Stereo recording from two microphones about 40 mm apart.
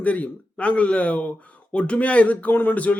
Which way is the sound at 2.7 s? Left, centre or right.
Left.